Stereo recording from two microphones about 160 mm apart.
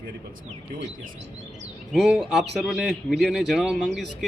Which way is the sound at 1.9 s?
Centre (ahead or behind).